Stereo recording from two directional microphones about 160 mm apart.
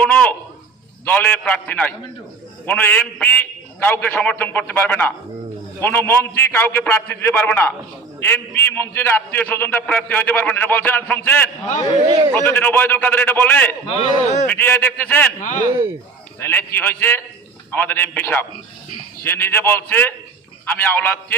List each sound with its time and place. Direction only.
0.0 s a sound: 10° left (ahead or behind)
1.0 s a man's voice: 10° left (ahead or behind)
11.9 s speech: 25° right (ahead or behind)
12.3 s a man's voice: 10° left (ahead or behind)
15.4 s speech: 55° left (ahead or behind)
16.4 s a man's voice: 10° left (ahead or behind)